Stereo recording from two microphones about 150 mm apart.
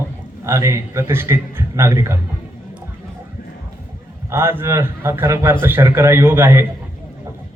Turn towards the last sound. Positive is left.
turn(degrees=-15)  # may be behind; listen again after turning